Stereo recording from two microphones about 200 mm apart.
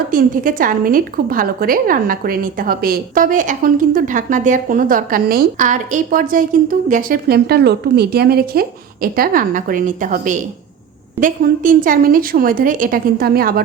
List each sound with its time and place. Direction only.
0.1 s a woman's voice: 45° right (ahead or behind)